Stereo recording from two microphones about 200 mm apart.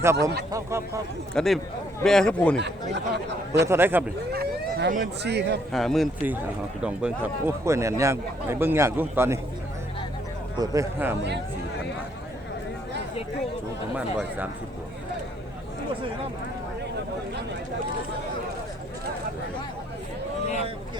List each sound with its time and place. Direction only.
0.0 s a man's voice: 15° right (ahead or behind)
1.3 s a man's voice: 5° left (ahead or behind)
2.9 s speech: 60° right (ahead or behind)
3.7 s a man's voice: 10° right (ahead or behind)
4.3 s speech: 50° right (ahead or behind)
5.7 s a man's voice: centre (ahead or behind)
10.6 s a man's voice: 15° right (ahead or behind)